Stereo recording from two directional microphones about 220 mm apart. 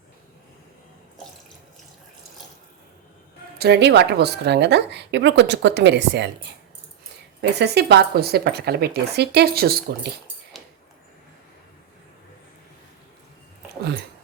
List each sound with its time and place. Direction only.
3.6 s a woman's voice: 50° right (ahead or behind)
7.6 s a woman's voice: 50° right (ahead or behind)